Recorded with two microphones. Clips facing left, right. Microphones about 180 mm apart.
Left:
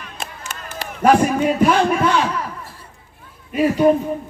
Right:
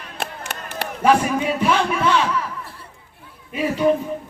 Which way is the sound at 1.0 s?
50° left (ahead or behind).